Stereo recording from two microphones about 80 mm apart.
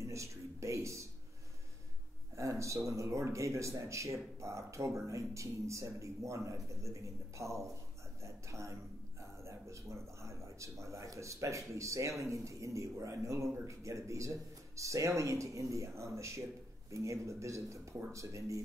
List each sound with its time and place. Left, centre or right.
0.0 s speech: right
2.3 s speech: right